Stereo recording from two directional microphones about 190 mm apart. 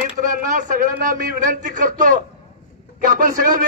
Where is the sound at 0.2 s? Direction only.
45° right (ahead or behind).